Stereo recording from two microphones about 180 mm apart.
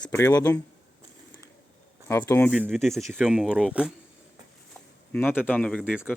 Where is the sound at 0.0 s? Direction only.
10° left (ahead or behind).